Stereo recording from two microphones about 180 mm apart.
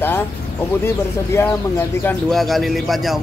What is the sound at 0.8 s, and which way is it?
Speech, 15° left (ahead or behind).